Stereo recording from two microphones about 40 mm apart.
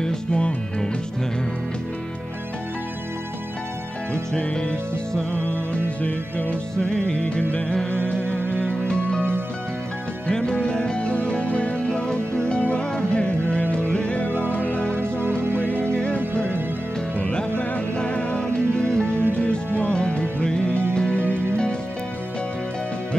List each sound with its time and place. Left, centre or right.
0.0 s music: centre
4.1 s music: left
5.3 s music: left
6.8 s music: left
10.2 s music: left
14.5 s music: left
15.0 s music: right
15.5 s music: left
17.2 s music: left